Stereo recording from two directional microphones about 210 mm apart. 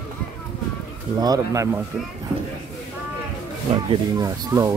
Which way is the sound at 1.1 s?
20° right (ahead or behind).